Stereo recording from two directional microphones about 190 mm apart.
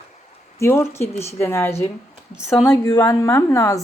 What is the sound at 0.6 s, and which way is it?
A woman's voice, 15° left (ahead or behind).